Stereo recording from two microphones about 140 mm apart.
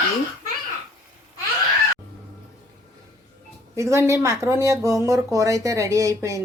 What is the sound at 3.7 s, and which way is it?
Speech, 20° right (ahead or behind).